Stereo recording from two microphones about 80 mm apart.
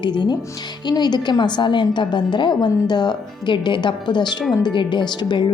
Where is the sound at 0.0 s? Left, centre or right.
Left.